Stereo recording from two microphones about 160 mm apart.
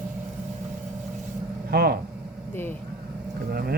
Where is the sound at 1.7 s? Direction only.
70° right (ahead or behind).